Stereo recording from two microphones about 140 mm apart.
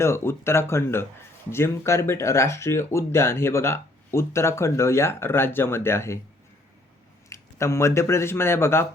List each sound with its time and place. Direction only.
0.0 s speech: 20° left (ahead or behind)
7.3 s speech: 20° left (ahead or behind)